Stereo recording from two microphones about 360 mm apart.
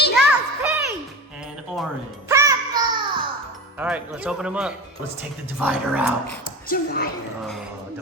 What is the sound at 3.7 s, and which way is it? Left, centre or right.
A child's voice, centre.